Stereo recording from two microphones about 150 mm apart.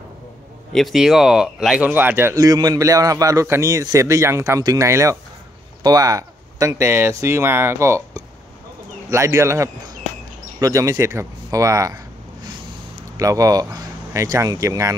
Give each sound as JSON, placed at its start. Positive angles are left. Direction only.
{"t": 0.7, "sound": "a man's voice", "side_deg": 0}
{"t": 13.2, "sound": "a man's voice", "side_deg": -25}